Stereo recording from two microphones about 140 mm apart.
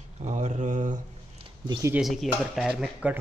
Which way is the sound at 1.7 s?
20° right (ahead or behind).